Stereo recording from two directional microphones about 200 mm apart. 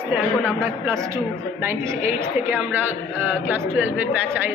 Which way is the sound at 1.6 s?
10° right (ahead or behind).